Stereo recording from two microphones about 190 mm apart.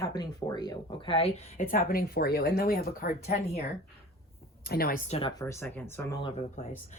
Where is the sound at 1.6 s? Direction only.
50° left (ahead or behind).